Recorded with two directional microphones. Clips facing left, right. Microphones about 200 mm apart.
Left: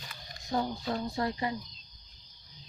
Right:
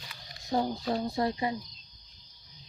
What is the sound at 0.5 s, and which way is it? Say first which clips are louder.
Speech: right 3 dB; 30° right (ahead or behind).